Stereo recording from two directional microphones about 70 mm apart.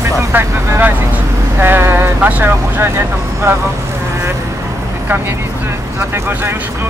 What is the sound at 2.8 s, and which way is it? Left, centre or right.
Speech, right.